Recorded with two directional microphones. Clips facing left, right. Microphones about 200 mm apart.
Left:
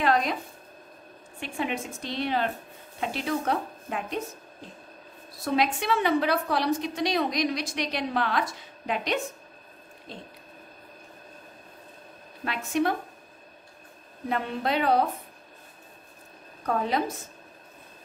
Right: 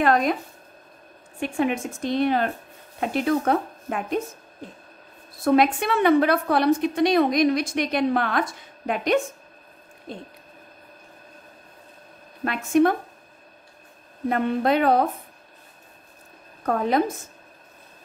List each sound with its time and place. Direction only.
0.0 s speech: 50° right (ahead or behind)
1.4 s a woman's voice: 50° right (ahead or behind)
5.4 s a woman's voice: 55° right (ahead or behind)
12.4 s a woman's voice: 50° right (ahead or behind)
14.3 s a woman's voice: 50° right (ahead or behind)
16.6 s a woman's voice: 50° right (ahead or behind)